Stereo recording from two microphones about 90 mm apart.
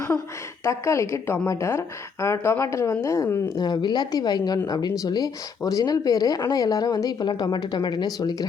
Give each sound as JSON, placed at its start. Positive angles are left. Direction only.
{"t": 0.6, "sound": "a woman's voice", "side_deg": 30}
{"t": 3.6, "sound": "speech", "side_deg": 55}